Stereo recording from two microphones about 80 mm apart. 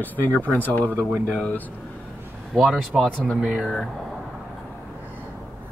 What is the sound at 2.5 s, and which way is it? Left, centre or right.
Speech, centre.